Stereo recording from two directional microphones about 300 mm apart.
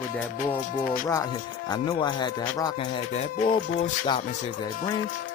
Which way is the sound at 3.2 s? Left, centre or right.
Left.